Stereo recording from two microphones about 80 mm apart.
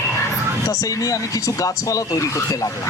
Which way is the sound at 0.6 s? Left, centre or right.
Left.